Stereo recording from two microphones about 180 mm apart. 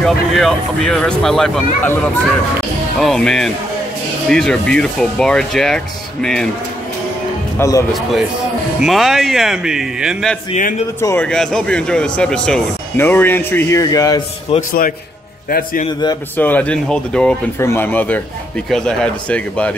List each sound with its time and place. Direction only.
0.0 s speech: centre (ahead or behind)
7.5 s speech: 15° left (ahead or behind)
8.8 s speech: centre (ahead or behind)
10.5 s a man's voice: 50° left (ahead or behind)
11.0 s speech: 10° left (ahead or behind)
14.5 s speech: 35° left (ahead or behind)
15.5 s a man's voice: 50° left (ahead or behind)
16.3 s speech: 10° left (ahead or behind)